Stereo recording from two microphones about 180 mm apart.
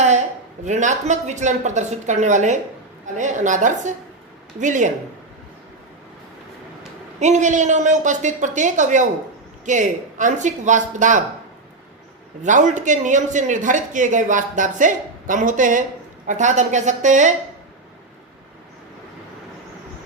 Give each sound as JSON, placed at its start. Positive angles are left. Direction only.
{"t": 0.6, "sound": "speech", "side_deg": -40}
{"t": 7.2, "sound": "speech", "side_deg": -40}
{"t": 12.4, "sound": "speech", "side_deg": -45}